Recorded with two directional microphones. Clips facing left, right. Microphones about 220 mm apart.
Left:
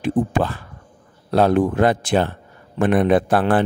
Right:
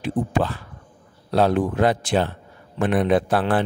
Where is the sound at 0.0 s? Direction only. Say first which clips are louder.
Left 3 dB; 50° left (ahead or behind).